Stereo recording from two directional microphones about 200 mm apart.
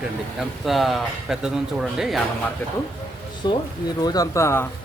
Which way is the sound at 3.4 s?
20° left (ahead or behind).